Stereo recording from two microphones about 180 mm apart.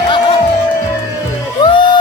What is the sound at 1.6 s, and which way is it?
Music, 25° left (ahead or behind).